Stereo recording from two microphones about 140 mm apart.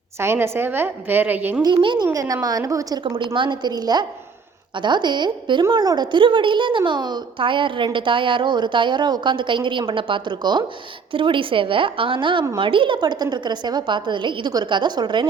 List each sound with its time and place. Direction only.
0.2 s a woman's voice: 20° right (ahead or behind)
1.6 s a woman's voice: 35° right (ahead or behind)
3.0 s a woman's voice: 35° right (ahead or behind)